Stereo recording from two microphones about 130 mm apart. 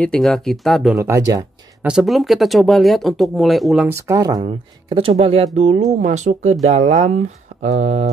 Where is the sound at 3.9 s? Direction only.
25° right (ahead or behind).